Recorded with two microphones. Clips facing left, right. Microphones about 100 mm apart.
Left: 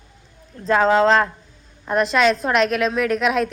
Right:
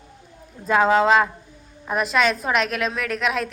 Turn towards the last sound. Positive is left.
turn(degrees=0)  # may be behind; listen again after turning